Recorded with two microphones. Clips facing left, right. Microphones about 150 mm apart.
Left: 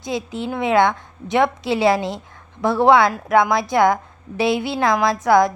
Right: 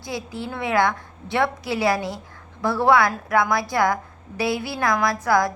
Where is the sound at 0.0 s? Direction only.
20° left (ahead or behind).